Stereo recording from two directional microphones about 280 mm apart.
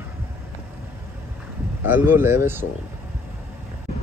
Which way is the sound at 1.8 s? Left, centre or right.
Centre.